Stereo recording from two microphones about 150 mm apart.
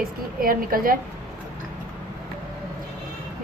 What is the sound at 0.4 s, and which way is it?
Speech, 70° right (ahead or behind).